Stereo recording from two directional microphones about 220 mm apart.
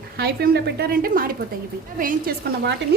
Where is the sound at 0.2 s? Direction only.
45° right (ahead or behind).